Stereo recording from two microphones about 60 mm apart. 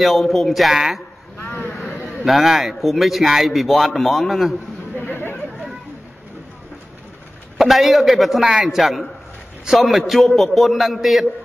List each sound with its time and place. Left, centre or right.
0.0 s a man's voice: centre
1.4 s vehicle: left
2.0 s a man's voice: centre
4.9 s chatter: left
7.5 s a man's voice: centre